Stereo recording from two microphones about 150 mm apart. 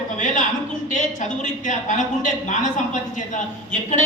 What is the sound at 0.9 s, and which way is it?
A man's voice, 55° left (ahead or behind).